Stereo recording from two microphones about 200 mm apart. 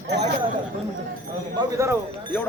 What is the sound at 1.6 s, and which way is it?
Speech, 15° right (ahead or behind).